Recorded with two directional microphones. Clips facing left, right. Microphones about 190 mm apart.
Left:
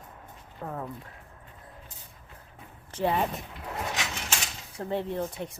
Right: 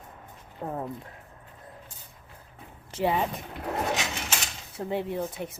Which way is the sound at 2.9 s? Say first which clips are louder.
Right 1 dB; 5° right (ahead or behind).